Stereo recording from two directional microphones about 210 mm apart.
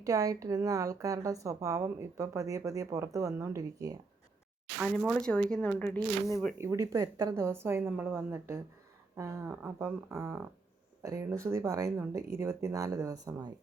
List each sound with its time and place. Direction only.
0.0 s a woman's voice: 15° right (ahead or behind)
4.8 s speech: centre (ahead or behind)
6.6 s a woman's voice: 15° right (ahead or behind)